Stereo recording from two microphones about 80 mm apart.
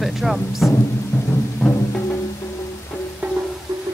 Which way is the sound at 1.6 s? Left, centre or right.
Centre.